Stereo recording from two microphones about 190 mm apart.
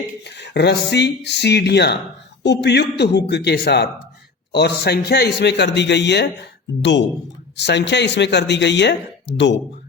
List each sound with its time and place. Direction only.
0.3 s speech: 60° left (ahead or behind)